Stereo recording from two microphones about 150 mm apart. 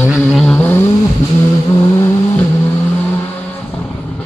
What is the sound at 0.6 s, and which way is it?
Vehicle, 15° left (ahead or behind).